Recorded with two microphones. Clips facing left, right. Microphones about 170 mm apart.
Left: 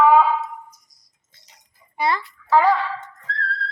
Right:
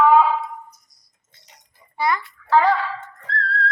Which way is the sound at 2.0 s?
25° left (ahead or behind).